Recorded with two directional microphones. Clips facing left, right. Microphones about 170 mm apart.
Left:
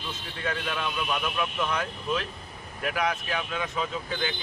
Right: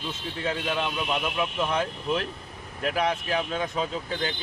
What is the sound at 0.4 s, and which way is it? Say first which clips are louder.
Speech: right 3 dB; 25° right (ahead or behind).